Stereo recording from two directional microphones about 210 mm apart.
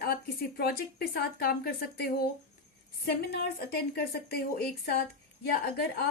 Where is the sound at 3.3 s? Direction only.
50° left (ahead or behind).